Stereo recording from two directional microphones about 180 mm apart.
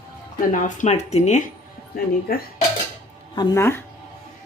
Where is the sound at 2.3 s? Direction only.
60° left (ahead or behind).